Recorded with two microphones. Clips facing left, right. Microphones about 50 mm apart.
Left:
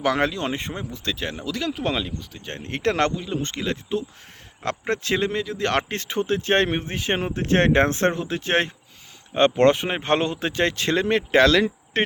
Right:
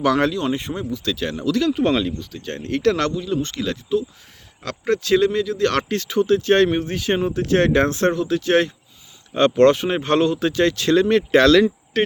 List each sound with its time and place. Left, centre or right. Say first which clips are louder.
0.0 s speech: right 4 dB; left
1.7 s speech: right 7 dB; centre
2.4 s speech: right 6 dB; left
9.3 s speech: right 3 dB; left
11.9 s a sound: right 3 dB; left